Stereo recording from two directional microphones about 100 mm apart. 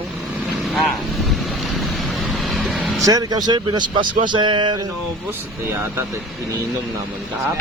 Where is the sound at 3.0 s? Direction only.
40° right (ahead or behind); by 4.8 s 55° right (ahead or behind).